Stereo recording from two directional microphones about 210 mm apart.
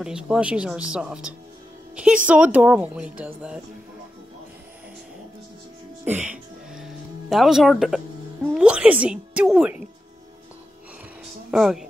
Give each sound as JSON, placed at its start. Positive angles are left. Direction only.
{"t": 0.0, "sound": "speech", "side_deg": -5}
{"t": 6.0, "sound": "music", "side_deg": -5}
{"t": 8.5, "sound": "speech", "side_deg": -5}
{"t": 11.5, "sound": "speech", "side_deg": 0}